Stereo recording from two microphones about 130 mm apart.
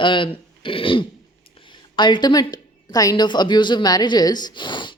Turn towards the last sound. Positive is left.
turn(degrees=40)  # may be behind; listen again after turning